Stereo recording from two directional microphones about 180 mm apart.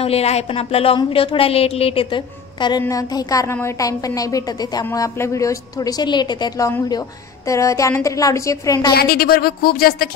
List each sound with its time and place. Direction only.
0.0 s a woman's voice: 35° left (ahead or behind); by 8.9 s 20° left (ahead or behind)
8.9 s speech: 60° left (ahead or behind)